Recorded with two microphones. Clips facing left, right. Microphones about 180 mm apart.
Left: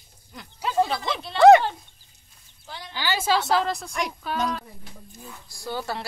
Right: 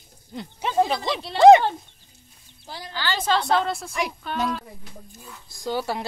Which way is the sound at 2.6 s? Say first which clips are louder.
Right 2 dB; 35° right (ahead or behind).